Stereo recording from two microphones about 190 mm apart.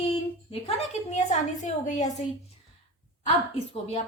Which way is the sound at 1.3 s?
40° left (ahead or behind).